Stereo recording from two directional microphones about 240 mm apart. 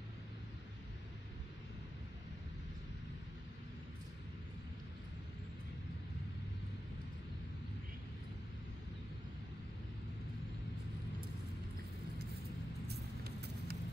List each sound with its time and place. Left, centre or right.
12.8 s vehicle: right